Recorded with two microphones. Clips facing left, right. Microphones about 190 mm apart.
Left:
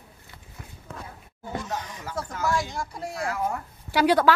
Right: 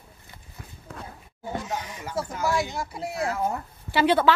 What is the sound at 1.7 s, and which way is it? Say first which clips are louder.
Speech: right 1 dB; 10° right (ahead or behind).